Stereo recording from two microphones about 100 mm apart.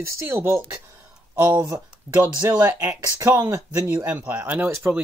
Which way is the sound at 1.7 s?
30° right (ahead or behind).